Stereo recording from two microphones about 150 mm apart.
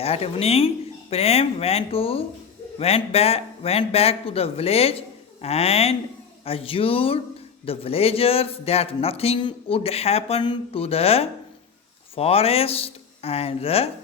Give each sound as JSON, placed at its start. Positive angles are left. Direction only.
{"t": 0.0, "sound": "speech", "side_deg": 40}